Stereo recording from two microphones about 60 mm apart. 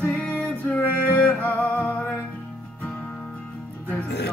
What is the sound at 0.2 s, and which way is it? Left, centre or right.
Music, left.